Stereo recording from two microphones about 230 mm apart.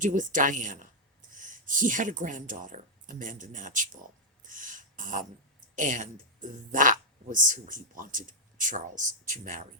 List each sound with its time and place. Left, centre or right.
0.0 s a woman's voice: right
4.4 s a sound: right
5.7 s speech: right